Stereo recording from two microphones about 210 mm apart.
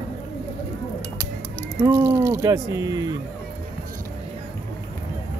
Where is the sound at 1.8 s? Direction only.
15° right (ahead or behind).